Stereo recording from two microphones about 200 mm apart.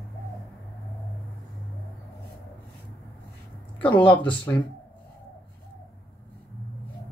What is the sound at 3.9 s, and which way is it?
Speech, 5° left (ahead or behind).